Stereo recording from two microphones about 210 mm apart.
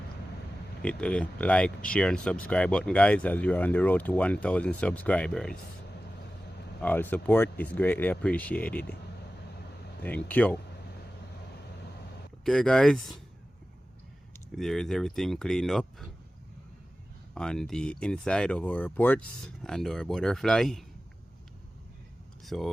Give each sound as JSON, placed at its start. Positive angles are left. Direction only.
{"t": 0.8, "sound": "speech", "side_deg": 5}
{"t": 6.8, "sound": "speech", "side_deg": 10}
{"t": 10.0, "sound": "speech", "side_deg": 5}
{"t": 12.5, "sound": "speech", "side_deg": 5}
{"t": 14.5, "sound": "speech", "side_deg": 0}
{"t": 17.3, "sound": "speech", "side_deg": 5}
{"t": 22.4, "sound": "speech", "side_deg": 0}